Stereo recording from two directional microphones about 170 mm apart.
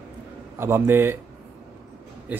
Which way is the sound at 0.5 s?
15° right (ahead or behind).